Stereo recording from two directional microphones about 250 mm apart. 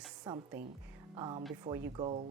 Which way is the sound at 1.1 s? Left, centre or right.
Centre.